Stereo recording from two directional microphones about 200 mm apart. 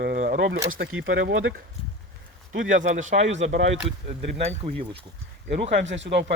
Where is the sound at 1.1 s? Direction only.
65° right (ahead or behind).